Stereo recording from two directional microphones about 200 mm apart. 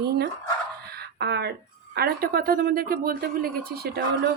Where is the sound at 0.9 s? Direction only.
55° right (ahead or behind).